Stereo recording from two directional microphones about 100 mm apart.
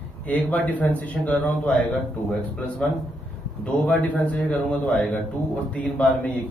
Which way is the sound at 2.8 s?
10° left (ahead or behind).